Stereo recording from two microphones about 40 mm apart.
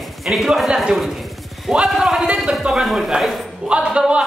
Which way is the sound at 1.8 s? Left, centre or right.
Centre.